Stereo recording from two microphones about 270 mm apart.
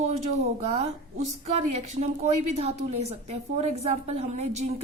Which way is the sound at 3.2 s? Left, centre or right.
Right.